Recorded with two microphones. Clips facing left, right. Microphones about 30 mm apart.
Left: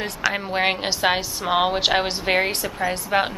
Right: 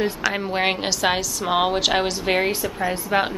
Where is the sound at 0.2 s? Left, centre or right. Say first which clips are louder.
Even; centre.